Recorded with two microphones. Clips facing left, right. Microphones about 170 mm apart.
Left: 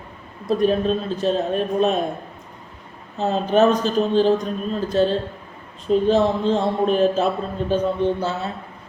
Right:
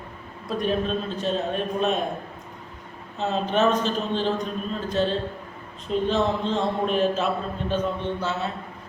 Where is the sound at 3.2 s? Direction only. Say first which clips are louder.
Left 5 dB; 40° left (ahead or behind).